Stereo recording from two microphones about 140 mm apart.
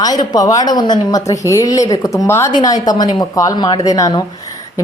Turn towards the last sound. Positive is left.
turn(degrees=25)  # may be behind; listen again after turning